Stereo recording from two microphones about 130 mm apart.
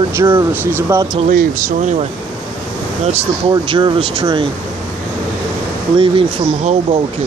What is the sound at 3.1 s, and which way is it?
Speech, 45° right (ahead or behind).